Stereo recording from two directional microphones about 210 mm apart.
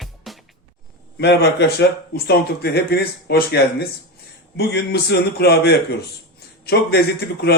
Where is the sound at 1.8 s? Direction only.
50° left (ahead or behind).